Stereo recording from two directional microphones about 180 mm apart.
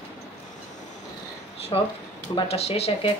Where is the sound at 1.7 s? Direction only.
30° left (ahead or behind).